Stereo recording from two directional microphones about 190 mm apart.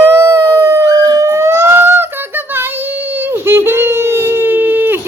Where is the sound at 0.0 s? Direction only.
15° right (ahead or behind).